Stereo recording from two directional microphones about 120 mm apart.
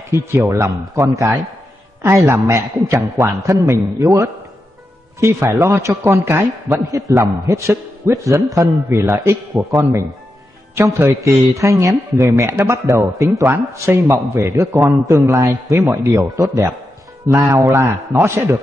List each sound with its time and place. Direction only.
0.1 s a man's voice: 20° right (ahead or behind)